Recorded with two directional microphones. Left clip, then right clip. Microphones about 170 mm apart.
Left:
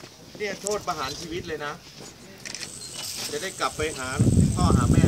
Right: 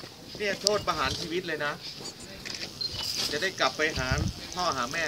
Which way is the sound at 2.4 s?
55° left (ahead or behind).